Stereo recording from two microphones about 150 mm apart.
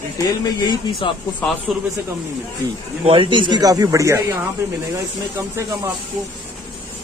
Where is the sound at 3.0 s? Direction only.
35° right (ahead or behind).